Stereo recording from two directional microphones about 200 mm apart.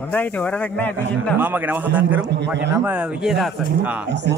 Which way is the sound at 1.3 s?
10° right (ahead or behind).